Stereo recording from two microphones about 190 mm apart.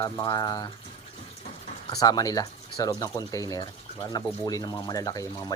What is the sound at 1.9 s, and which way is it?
Speech, 20° left (ahead or behind).